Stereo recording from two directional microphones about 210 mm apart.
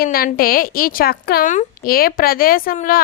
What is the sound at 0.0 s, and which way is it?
A woman's voice, 45° left (ahead or behind).